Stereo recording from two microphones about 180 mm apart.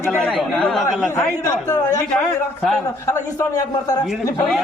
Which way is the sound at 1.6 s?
20° left (ahead or behind).